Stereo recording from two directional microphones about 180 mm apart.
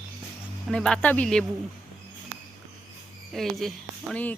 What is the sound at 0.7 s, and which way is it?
Speech, 5° left (ahead or behind).